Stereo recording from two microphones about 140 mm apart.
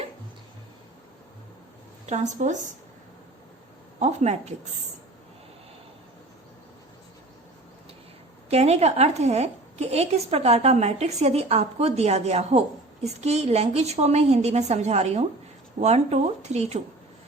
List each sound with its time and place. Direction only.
2.0 s a woman's voice: 55° right (ahead or behind)
4.0 s a woman's voice: 50° right (ahead or behind)
8.4 s a woman's voice: 50° right (ahead or behind)